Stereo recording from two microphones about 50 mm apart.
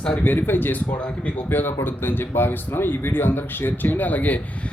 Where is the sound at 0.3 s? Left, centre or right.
Left.